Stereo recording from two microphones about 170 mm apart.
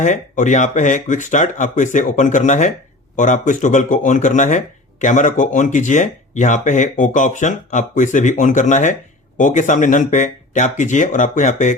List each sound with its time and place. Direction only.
0.0 s speech: 50° left (ahead or behind)